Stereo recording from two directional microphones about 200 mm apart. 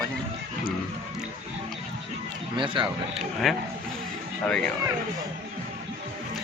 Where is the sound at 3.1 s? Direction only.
Centre (ahead or behind).